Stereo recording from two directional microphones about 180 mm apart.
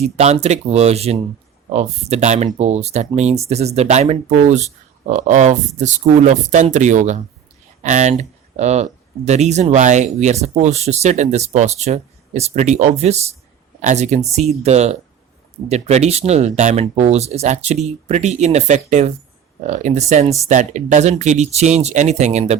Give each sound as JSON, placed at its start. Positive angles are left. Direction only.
{"t": 0.0, "sound": "speech", "side_deg": -35}